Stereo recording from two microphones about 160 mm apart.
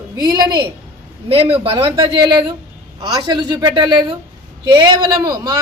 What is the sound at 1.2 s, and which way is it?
A man's voice, 35° right (ahead or behind).